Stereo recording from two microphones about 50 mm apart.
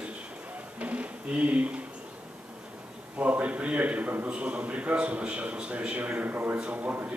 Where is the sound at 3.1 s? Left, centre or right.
Right.